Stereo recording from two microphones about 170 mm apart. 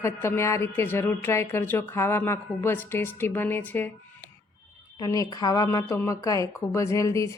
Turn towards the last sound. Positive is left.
turn(degrees=20)  # may be behind; listen again after turning